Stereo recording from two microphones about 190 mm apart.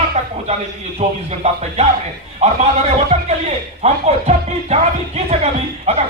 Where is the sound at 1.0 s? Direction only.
35° right (ahead or behind).